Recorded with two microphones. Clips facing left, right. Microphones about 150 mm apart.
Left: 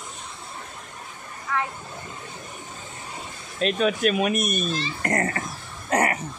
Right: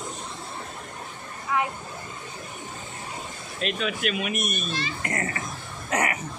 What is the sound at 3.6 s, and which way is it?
A child's voice, 40° left (ahead or behind).